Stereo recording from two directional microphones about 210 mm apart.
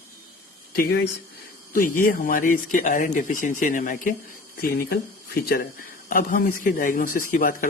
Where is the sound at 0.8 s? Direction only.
50° left (ahead or behind).